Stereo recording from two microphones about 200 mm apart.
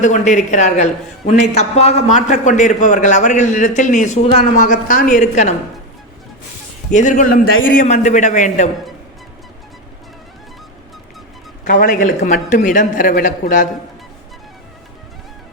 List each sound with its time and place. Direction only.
0.0 s a man's voice: 35° left (ahead or behind)
6.9 s a man's voice: 40° left (ahead or behind)
11.6 s a man's voice: 45° left (ahead or behind)